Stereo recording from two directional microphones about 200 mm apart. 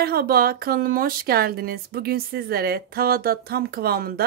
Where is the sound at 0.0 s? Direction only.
50° right (ahead or behind).